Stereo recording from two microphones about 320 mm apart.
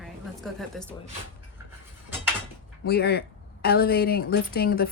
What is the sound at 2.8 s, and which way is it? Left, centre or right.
Speech, left.